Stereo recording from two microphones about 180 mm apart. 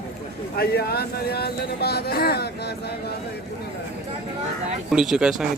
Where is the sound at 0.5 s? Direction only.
60° left (ahead or behind).